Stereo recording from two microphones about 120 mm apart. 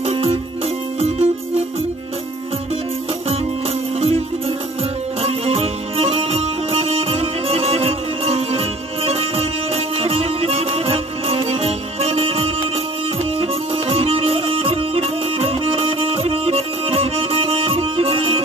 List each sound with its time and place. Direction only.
0.0 s music: 50° right (ahead or behind)
4.0 s music: 50° right (ahead or behind)